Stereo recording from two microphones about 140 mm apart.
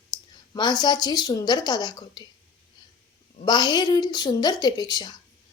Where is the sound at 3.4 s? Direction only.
30° left (ahead or behind).